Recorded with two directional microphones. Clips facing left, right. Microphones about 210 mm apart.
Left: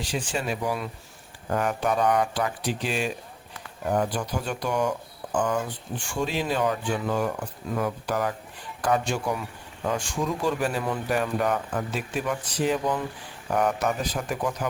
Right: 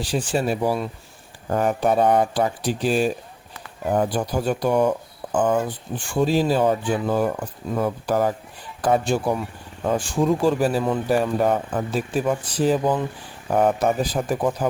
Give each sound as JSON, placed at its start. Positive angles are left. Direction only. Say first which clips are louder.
{"t": 0.0, "sound": "speech", "louder": "right 6 dB", "side_deg": -35}